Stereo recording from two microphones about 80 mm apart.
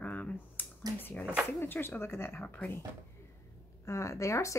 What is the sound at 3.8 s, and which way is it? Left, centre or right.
Speech, left.